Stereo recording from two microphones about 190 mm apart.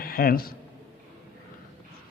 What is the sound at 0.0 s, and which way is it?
Speech, 50° left (ahead or behind).